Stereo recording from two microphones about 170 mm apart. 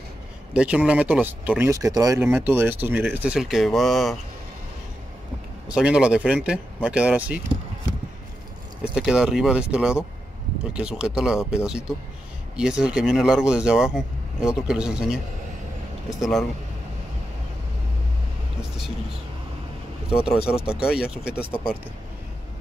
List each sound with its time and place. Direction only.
0.5 s speech: 5° right (ahead or behind)
5.7 s speech: 5° right (ahead or behind)
8.9 s speech: 5° right (ahead or behind)
20.2 s speech: 5° right (ahead or behind)